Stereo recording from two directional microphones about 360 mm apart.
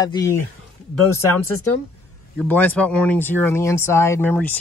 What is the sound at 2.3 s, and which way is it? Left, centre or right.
Speech, centre.